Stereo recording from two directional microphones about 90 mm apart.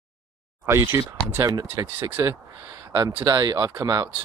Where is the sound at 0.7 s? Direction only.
30° right (ahead or behind).